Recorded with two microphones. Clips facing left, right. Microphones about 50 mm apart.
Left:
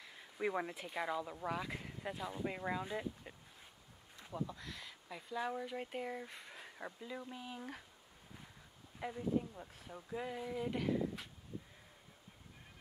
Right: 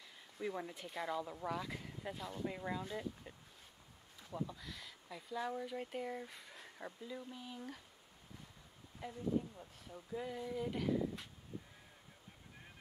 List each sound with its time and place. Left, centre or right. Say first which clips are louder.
0.4 s speech: left 4 dB; left
0.7 s speech: left 2 dB; centre
4.4 s speech: left 1 dB; centre; by 7.8 s left
9.0 s speech: left 1 dB; left